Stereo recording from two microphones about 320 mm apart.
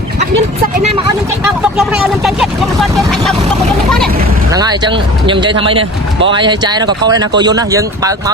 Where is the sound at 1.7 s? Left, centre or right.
Centre.